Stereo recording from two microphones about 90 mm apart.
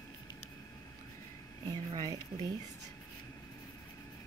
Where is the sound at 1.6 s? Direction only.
45° right (ahead or behind).